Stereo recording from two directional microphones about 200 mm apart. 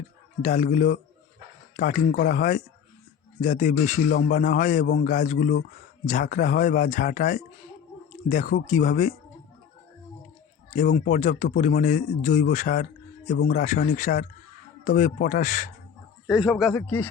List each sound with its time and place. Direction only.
0.4 s speech: 40° left (ahead or behind)
10.7 s speech: 40° left (ahead or behind)
16.2 s speech: centre (ahead or behind)